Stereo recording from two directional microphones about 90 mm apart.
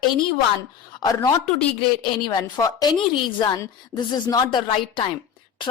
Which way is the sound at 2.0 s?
55° left (ahead or behind).